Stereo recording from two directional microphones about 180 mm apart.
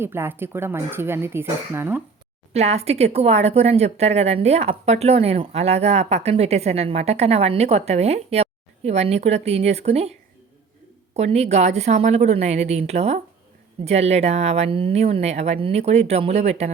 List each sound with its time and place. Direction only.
0.0 s speech: 15° right (ahead or behind)
2.5 s speech: 35° right (ahead or behind)